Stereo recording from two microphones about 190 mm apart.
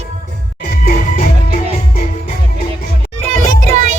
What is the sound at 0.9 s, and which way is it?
Music, 40° left (ahead or behind).